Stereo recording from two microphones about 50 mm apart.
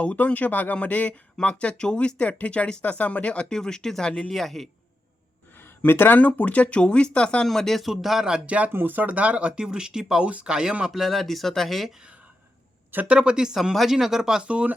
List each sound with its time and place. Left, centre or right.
0.0 s speech: left
3.5 s speech: centre
5.5 s a sound: left
6.1 s speech: left
7.4 s speech: centre
8.4 s speech: right
8.7 s speech: right; by 10.9 s centre
10.9 s speech: centre
13.1 s speech: centre
14.4 s speech: right